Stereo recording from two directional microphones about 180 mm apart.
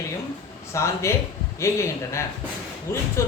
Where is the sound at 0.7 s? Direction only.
15° left (ahead or behind).